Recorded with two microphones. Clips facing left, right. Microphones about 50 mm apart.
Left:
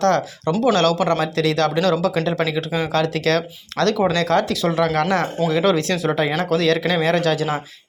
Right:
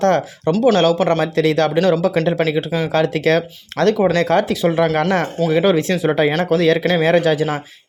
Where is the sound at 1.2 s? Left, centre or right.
Right.